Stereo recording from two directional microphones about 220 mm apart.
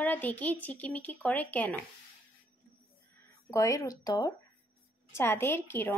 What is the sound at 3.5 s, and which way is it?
Speech, 15° left (ahead or behind).